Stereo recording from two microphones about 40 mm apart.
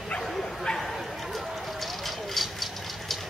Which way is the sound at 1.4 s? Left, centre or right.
Centre.